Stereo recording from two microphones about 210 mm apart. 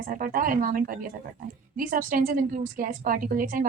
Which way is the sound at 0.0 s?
40° right (ahead or behind).